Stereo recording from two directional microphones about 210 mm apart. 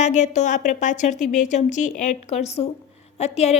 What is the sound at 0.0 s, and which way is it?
A woman's voice, 35° left (ahead or behind).